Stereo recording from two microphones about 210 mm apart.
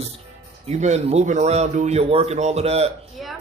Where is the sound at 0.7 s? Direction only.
30° right (ahead or behind).